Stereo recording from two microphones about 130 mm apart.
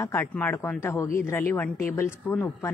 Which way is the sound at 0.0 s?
15° left (ahead or behind).